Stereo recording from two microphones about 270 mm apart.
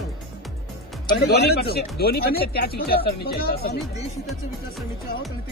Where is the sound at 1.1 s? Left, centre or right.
Left.